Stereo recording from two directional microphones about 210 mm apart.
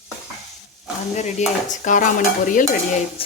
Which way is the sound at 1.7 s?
35° left (ahead or behind).